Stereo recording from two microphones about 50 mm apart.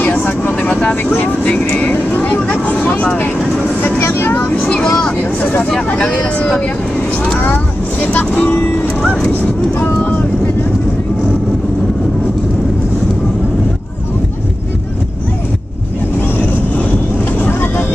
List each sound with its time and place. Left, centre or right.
0.1 s vehicle: left
3.8 s vehicle: left
4.7 s vehicle: centre
7.4 s vehicle: left
8.1 s speech: left
9.8 s vehicle: left